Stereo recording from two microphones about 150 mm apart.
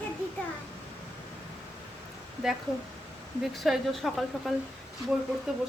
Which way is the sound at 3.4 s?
Centre (ahead or behind).